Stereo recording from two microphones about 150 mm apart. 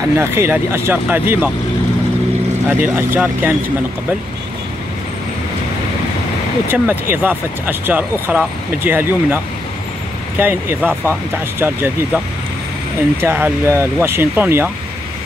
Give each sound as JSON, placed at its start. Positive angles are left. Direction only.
{"t": 0.1, "sound": "speech", "side_deg": -15}
{"t": 2.8, "sound": "speech", "side_deg": -15}
{"t": 6.7, "sound": "speech", "side_deg": -10}
{"t": 10.4, "sound": "speech", "side_deg": -15}
{"t": 13.2, "sound": "speech", "side_deg": -15}